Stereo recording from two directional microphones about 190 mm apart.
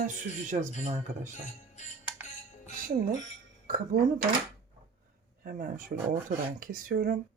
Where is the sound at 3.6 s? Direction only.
50° right (ahead or behind).